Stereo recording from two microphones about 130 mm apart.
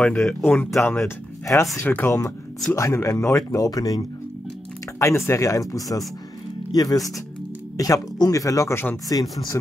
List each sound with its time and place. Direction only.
0.0 s speech: 10° left (ahead or behind); by 9.6 s 30° left (ahead or behind)